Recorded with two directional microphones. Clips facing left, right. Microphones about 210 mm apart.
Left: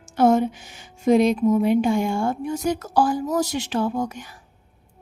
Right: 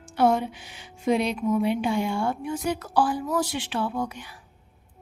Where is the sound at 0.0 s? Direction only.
45° left (ahead or behind).